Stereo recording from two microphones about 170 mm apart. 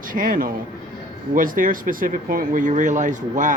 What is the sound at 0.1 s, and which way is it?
A man's voice, 55° right (ahead or behind).